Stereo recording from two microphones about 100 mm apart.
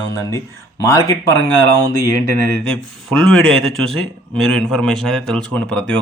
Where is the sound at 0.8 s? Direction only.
35° left (ahead or behind).